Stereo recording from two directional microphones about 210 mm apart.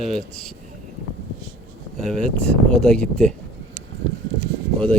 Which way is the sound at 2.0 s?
Centre (ahead or behind).